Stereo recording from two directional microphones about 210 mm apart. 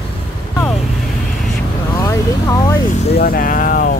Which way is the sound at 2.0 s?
15° left (ahead or behind).